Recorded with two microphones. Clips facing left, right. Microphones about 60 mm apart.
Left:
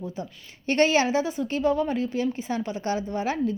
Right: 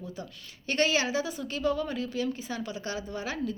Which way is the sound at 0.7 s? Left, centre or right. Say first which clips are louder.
Left 6 dB; left.